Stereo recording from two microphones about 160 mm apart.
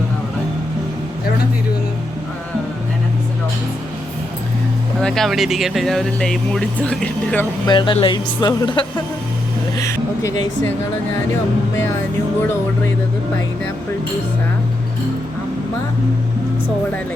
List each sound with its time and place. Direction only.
4.9 s speech: 5° left (ahead or behind)
7.7 s a woman's voice: 30° left (ahead or behind)
9.7 s speech: 20° left (ahead or behind)